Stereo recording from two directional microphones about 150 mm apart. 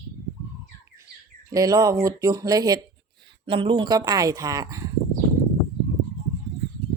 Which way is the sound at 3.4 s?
35° right (ahead or behind).